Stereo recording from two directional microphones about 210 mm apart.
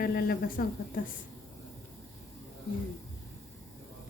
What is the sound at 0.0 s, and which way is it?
Speech, 45° left (ahead or behind).